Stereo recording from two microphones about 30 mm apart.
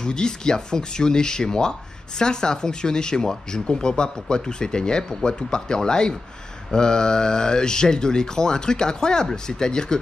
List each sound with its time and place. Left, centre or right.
0.0 s speech: left